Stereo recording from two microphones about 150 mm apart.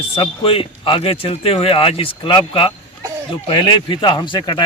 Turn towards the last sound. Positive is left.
turn(degrees=30)  # may be behind; listen again after turning